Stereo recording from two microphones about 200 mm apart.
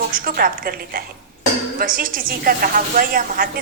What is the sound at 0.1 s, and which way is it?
A woman's voice, 45° right (ahead or behind).